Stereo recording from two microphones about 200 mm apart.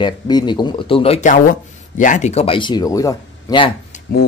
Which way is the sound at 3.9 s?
35° left (ahead or behind).